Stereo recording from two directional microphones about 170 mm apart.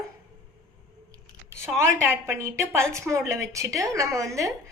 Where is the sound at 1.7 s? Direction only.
15° right (ahead or behind).